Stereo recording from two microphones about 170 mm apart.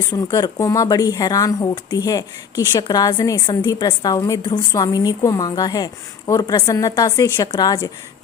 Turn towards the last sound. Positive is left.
turn(degrees=20)  # may be behind; listen again after turning